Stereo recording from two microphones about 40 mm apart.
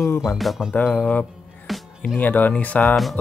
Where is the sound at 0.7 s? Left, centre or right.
Left.